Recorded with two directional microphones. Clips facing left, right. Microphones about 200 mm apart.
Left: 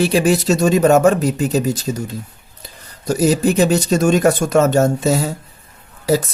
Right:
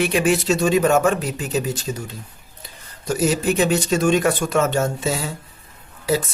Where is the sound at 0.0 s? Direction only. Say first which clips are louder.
Left 4 dB; 35° left (ahead or behind).